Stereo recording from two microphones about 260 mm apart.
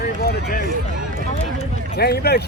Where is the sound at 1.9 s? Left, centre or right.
Left.